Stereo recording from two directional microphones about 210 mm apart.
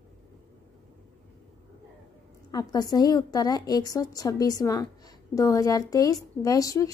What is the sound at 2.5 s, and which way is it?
A woman's voice, 20° left (ahead or behind).